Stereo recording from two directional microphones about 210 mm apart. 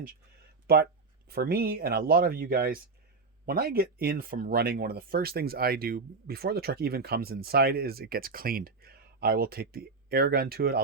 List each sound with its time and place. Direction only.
0.7 s speech: 45° right (ahead or behind)